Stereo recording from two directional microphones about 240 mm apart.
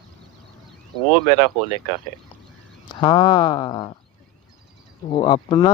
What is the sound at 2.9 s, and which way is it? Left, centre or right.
Speech, centre.